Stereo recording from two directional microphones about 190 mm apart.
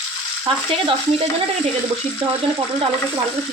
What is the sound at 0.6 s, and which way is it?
Stir, 30° right (ahead or behind).